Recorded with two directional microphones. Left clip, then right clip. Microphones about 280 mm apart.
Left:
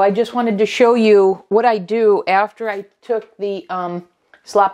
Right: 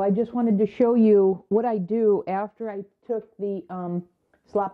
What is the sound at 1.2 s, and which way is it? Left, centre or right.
Speech, centre.